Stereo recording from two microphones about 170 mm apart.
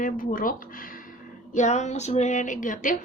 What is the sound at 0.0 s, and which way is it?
Speech, 55° left (ahead or behind).